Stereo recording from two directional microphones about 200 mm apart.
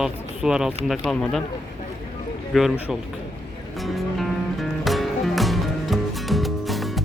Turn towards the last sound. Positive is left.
turn(degrees=0)  # may be behind; listen again after turning